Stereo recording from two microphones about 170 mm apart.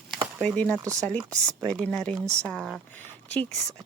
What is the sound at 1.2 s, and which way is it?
Speech, 20° right (ahead or behind).